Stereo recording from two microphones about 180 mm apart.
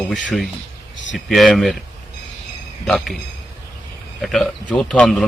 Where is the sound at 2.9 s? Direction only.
Centre (ahead or behind).